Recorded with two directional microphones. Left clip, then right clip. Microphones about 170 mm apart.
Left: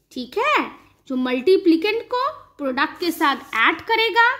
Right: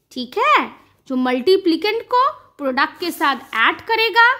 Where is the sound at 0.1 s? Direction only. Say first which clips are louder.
Right 4 dB; 20° right (ahead or behind).